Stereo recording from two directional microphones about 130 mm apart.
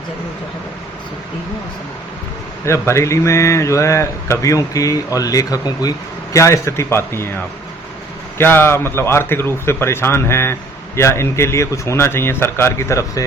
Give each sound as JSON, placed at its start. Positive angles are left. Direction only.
{"t": 2.6, "sound": "a man's voice", "side_deg": 20}